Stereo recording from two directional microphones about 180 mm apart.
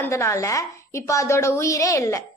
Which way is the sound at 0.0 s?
15° left (ahead or behind).